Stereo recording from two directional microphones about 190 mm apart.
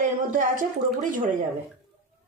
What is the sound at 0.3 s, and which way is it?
Speech, 45° right (ahead or behind).